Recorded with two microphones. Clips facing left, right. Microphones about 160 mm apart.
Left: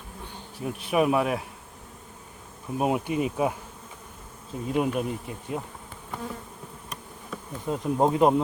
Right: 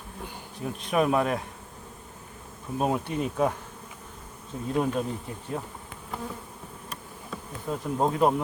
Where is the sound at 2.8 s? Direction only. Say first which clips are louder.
Left 2 dB; 15° left (ahead or behind).